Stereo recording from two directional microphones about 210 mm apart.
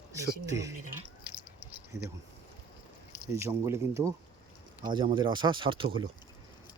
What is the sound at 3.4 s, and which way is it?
Speech, 15° right (ahead or behind).